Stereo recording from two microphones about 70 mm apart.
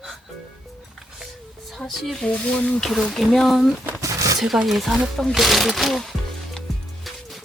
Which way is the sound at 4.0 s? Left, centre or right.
Right.